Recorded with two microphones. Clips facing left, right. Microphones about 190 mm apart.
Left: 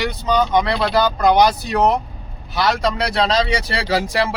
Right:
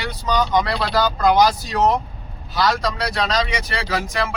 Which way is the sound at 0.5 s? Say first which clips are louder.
Left 2 dB; 25° left (ahead or behind).